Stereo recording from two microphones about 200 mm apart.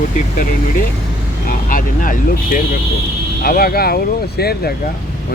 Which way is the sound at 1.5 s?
45° left (ahead or behind).